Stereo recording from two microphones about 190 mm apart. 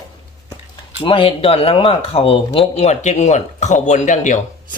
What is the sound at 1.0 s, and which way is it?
Speech, 25° left (ahead or behind).